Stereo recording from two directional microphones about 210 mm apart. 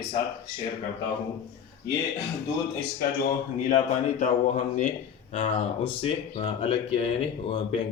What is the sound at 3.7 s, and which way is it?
Speech, 35° left (ahead or behind).